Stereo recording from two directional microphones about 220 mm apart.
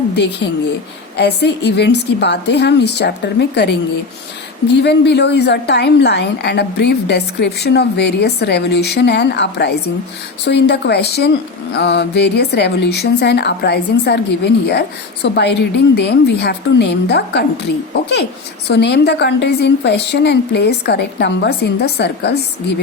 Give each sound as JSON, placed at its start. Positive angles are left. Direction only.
{"t": 0.2, "sound": "speech", "side_deg": 50}
{"t": 18.7, "sound": "speech", "side_deg": 50}